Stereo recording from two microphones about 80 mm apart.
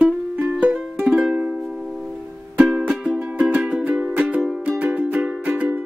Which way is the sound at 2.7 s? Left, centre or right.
Centre.